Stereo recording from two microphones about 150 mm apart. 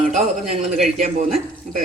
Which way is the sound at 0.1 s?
50° right (ahead or behind).